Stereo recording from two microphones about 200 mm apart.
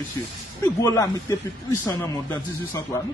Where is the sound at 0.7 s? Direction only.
15° left (ahead or behind).